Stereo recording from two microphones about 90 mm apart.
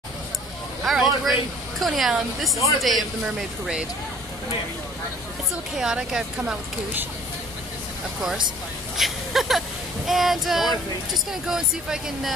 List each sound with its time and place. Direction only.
0.8 s a woman's voice: centre (ahead or behind)
5.8 s speech: 10° right (ahead or behind)
6.4 s speech: 20° right (ahead or behind)
8.9 s a woman's voice: centre (ahead or behind)